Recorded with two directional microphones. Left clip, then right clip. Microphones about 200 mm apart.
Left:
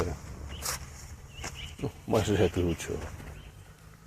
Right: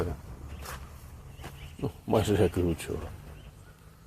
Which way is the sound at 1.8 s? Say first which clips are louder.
Right 1 dB; 20° right (ahead or behind).